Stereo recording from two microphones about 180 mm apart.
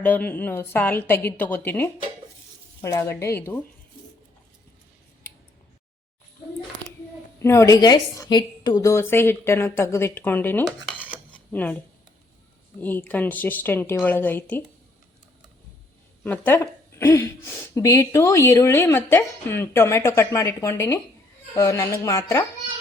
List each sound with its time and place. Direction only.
0.0 s a woman's voice: 10° left (ahead or behind)
7.3 s a woman's voice: 15° left (ahead or behind)
11.0 s a sound: 10° left (ahead or behind)
12.8 s a woman's voice: 10° left (ahead or behind)
16.2 s a woman's voice: 10° left (ahead or behind)